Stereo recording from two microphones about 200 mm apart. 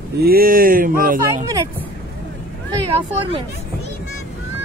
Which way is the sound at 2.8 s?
25° right (ahead or behind).